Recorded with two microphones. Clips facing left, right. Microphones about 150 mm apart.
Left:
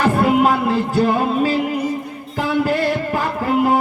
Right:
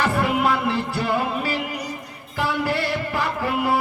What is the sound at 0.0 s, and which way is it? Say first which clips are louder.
Music: left 6 dB; 40° left (ahead or behind).